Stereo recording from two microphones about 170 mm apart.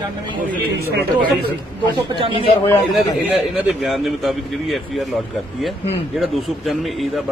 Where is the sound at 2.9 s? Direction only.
Centre (ahead or behind).